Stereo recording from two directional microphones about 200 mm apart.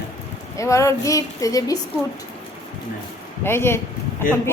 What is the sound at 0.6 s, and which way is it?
A woman's voice, 15° left (ahead or behind).